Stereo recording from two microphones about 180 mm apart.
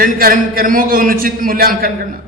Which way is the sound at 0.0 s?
55° right (ahead or behind).